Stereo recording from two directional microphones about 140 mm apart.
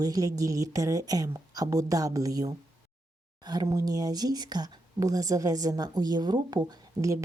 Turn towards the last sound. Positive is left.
turn(degrees=-25)  # may be behind; listen again after turning